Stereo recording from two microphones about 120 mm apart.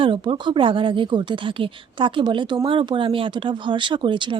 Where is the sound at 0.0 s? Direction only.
45° right (ahead or behind).